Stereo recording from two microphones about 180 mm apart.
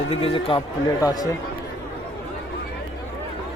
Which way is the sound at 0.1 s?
30° left (ahead or behind).